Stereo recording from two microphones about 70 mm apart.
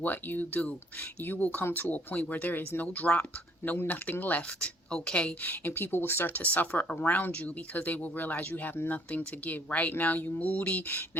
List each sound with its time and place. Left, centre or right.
0.0 s speech: left
4.9 s a woman's voice: centre
5.4 s speech: left